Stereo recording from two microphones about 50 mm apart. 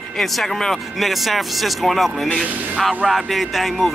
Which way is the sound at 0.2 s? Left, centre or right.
Centre.